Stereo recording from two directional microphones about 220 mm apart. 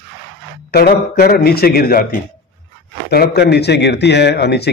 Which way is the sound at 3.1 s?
45° left (ahead or behind).